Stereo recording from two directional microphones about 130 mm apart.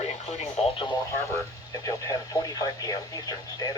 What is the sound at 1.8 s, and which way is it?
Speech, 25° left (ahead or behind).